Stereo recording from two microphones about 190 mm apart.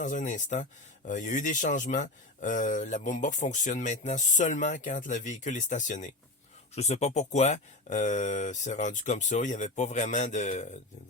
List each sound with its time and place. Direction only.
0.0 s speech: 40° left (ahead or behind)